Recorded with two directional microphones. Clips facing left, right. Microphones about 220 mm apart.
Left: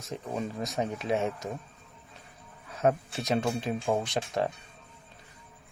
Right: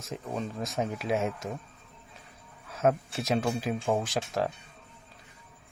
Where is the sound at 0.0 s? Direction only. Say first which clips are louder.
Left 1 dB; 5° left (ahead or behind).